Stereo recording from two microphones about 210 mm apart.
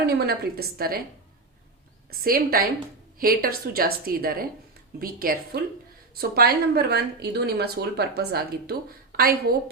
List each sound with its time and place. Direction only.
0.0 s speech: 45° right (ahead or behind)
2.2 s speech: 45° right (ahead or behind)